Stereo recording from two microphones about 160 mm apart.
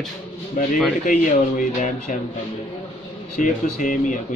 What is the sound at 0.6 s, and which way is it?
A man's voice, 55° left (ahead or behind).